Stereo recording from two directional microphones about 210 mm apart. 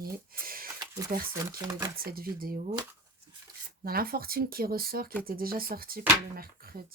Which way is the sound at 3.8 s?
45° right (ahead or behind).